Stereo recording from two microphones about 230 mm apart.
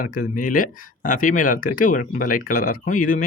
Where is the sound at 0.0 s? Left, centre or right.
Left.